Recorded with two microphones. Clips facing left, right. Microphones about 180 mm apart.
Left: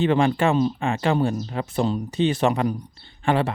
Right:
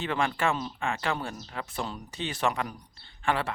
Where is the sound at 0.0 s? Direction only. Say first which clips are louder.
Left 9 dB; 25° left (ahead or behind).